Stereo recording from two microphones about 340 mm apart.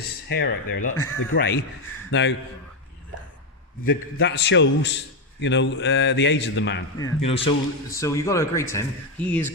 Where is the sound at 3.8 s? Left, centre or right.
Left.